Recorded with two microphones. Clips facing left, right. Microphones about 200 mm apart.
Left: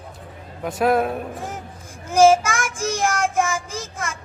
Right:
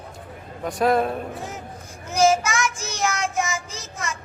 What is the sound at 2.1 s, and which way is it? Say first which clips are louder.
Child singing: left 5 dB; 50° left (ahead or behind).